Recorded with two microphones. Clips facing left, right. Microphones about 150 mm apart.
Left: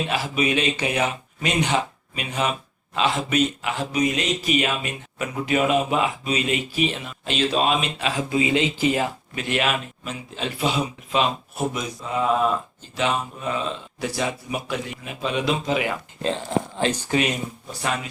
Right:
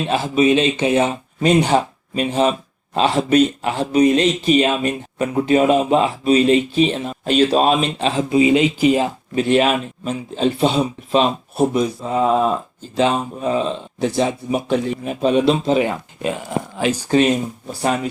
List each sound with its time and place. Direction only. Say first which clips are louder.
0.1 s speech: right 12 dB; 30° right (ahead or behind)
9.3 s speech: right 11 dB; 35° right (ahead or behind)
16.2 s speech: right 1 dB; 10° right (ahead or behind)
17.1 s speech: right 8 dB; 35° right (ahead or behind)